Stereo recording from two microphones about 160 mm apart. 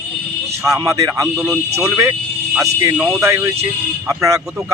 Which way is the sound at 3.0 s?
20° right (ahead or behind).